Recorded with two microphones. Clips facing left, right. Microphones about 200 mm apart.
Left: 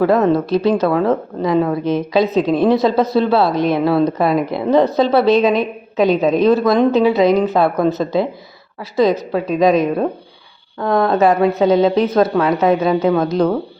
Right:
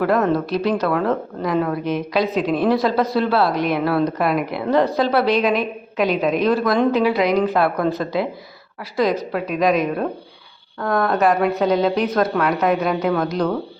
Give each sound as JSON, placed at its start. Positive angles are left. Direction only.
{"t": 0.0, "sound": "a woman's voice", "side_deg": 25}